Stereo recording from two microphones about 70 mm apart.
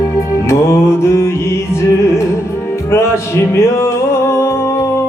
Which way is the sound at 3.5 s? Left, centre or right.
Left.